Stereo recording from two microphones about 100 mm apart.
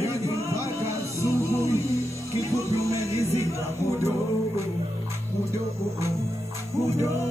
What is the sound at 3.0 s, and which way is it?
Music, 30° left (ahead or behind).